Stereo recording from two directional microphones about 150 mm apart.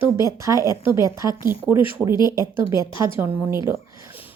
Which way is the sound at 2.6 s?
30° left (ahead or behind).